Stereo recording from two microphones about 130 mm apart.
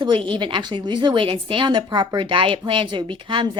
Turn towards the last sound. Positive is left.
turn(degrees=-40)  # may be behind; listen again after turning